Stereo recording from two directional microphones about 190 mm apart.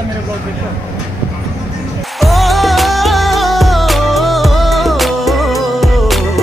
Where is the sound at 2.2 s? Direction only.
Centre (ahead or behind).